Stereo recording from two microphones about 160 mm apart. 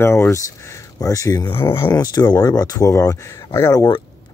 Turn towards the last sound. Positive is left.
turn(degrees=25)  # may be behind; listen again after turning